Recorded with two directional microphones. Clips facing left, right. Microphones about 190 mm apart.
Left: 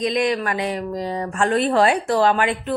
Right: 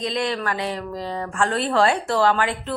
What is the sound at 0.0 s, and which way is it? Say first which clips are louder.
A woman's voice: left 4 dB; 15° left (ahead or behind).